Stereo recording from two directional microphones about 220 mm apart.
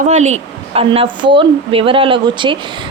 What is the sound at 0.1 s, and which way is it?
Speech, 30° right (ahead or behind).